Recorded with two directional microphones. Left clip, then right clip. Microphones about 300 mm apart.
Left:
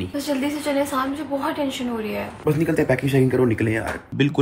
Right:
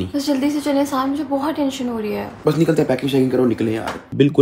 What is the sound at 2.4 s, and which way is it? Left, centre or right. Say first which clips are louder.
Speech: right 4 dB; centre.